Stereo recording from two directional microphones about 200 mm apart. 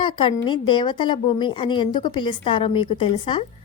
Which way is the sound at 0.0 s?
25° left (ahead or behind).